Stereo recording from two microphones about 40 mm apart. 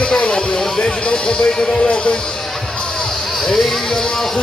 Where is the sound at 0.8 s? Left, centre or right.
Left.